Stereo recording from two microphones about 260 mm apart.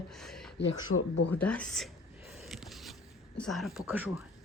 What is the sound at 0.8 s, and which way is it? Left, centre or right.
Speech, left.